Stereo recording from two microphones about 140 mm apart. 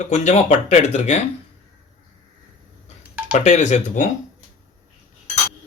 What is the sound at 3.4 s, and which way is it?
Speech, 60° left (ahead or behind).